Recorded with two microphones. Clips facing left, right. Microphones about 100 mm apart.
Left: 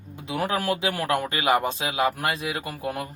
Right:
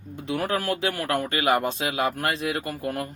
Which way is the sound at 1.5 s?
10° left (ahead or behind).